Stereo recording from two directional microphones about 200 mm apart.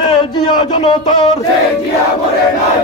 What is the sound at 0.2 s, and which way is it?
Speech, 20° left (ahead or behind).